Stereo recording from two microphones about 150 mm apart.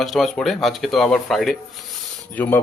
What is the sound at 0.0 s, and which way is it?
Speech, centre (ahead or behind).